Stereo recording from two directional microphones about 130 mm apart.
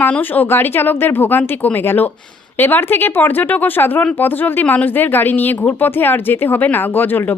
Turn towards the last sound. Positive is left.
turn(degrees=15)  # may be behind; listen again after turning